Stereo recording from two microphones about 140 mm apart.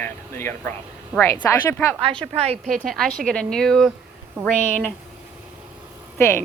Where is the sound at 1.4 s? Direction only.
20° left (ahead or behind).